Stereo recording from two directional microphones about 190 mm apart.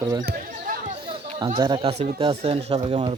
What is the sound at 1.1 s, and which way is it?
Chatter, 25° right (ahead or behind).